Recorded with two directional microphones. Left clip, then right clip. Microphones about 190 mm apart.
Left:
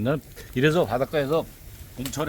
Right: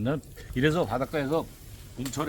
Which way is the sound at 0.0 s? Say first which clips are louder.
Left 4 dB; 75° left (ahead or behind).